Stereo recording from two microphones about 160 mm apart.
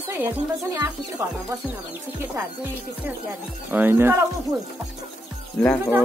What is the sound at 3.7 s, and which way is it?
Speech, 10° right (ahead or behind).